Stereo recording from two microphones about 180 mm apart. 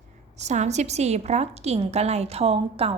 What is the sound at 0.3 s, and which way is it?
A woman's voice, 40° right (ahead or behind).